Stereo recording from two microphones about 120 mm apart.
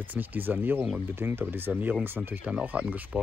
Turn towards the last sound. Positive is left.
turn(degrees=-10)  # may be behind; listen again after turning